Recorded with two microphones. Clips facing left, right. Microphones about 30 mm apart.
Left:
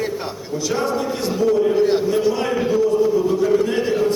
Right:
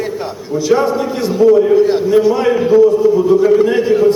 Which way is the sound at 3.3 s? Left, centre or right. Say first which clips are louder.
Right 7 dB; right.